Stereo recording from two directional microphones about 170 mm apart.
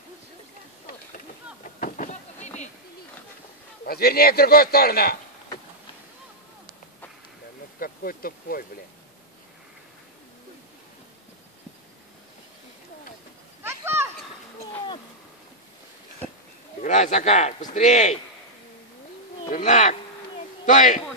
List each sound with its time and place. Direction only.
0.8 s a sound: 55° left (ahead or behind)
3.8 s a man's voice: 65° left (ahead or behind)
7.8 s speech: 60° left (ahead or behind)
13.6 s a sound: 15° right (ahead or behind)
16.8 s speech: 50° left (ahead or behind)
19.5 s speech: 45° left (ahead or behind)